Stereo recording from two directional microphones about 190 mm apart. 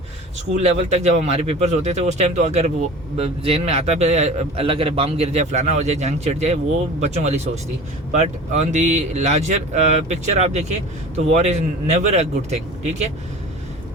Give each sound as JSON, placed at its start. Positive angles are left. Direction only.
{"t": 0.5, "sound": "a man's voice", "side_deg": -35}